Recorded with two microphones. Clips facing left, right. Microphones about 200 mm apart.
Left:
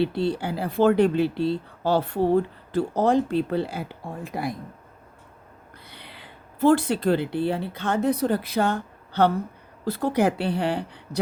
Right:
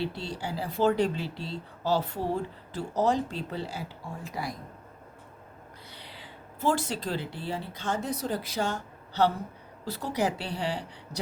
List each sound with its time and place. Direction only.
0.0 s speech: 60° left (ahead or behind)
5.9 s speech: 60° left (ahead or behind)